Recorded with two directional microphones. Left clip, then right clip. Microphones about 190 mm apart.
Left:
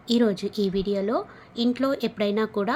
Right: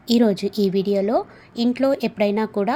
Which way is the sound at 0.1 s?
20° right (ahead or behind).